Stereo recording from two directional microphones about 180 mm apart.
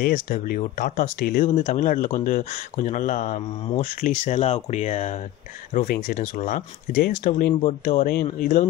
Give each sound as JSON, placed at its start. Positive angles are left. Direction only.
{"t": 0.0, "sound": "speech", "side_deg": 50}
{"t": 5.7, "sound": "speech", "side_deg": 50}
{"t": 7.2, "sound": "speech", "side_deg": 45}